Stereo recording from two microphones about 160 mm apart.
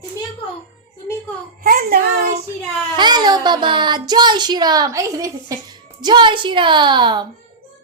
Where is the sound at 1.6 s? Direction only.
65° right (ahead or behind).